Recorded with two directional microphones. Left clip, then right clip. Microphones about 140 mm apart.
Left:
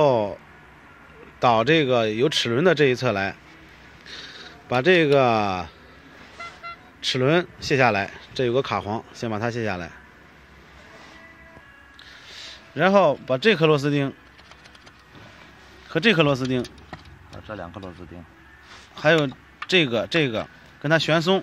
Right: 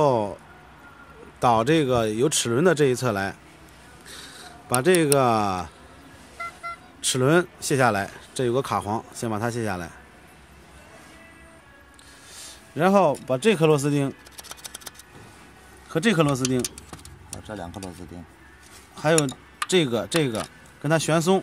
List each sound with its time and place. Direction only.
0.0 s a sound: 20° right (ahead or behind)
1.4 s speech: 25° right (ahead or behind)
7.0 s speech: 30° right (ahead or behind)
12.3 s a sound: 20° right (ahead or behind)
13.2 s speech: 15° right (ahead or behind)
15.9 s speech: 15° right (ahead or behind)
17.4 s speech: 25° right (ahead or behind)
18.9 s speech: 15° right (ahead or behind)